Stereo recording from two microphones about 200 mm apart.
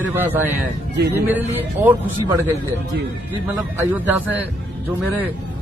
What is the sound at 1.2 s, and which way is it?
Speech, 10° right (ahead or behind).